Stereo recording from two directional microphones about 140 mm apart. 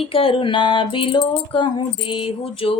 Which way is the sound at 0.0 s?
40° left (ahead or behind).